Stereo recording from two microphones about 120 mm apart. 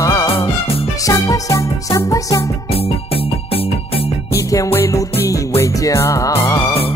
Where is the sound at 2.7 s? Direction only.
55° left (ahead or behind).